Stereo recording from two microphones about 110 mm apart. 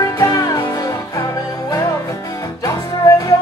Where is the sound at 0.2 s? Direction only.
30° left (ahead or behind).